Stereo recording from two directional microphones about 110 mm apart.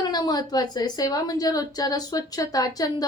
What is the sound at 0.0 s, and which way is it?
A woman's voice, 40° left (ahead or behind).